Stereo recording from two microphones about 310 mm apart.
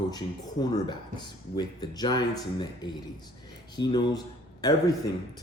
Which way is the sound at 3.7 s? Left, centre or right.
Centre.